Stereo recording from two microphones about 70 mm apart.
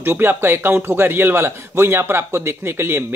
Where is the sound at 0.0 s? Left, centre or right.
Right.